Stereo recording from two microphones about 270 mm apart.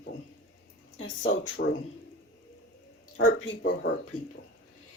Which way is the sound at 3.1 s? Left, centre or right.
Left.